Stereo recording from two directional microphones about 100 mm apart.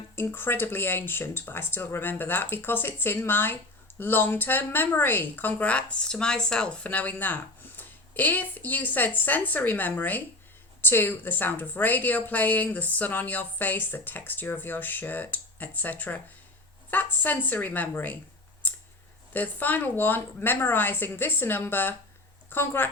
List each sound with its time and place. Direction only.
0.2 s a woman's voice: 20° left (ahead or behind)
19.3 s a woman's voice: 15° left (ahead or behind)